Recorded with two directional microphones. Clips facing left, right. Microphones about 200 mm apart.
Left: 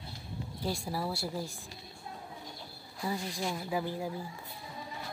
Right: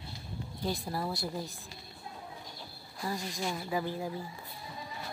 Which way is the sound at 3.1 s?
5° left (ahead or behind).